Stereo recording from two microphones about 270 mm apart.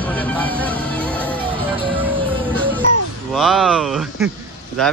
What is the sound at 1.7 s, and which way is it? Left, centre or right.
Music, centre.